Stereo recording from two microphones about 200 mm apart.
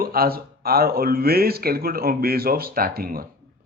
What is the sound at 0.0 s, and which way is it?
Speech, 50° right (ahead or behind).